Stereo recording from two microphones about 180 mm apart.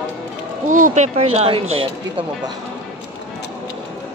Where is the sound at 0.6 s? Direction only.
45° right (ahead or behind).